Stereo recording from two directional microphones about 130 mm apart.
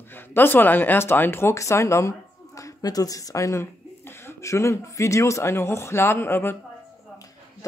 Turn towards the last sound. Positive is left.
turn(degrees=15)  # may be behind; listen again after turning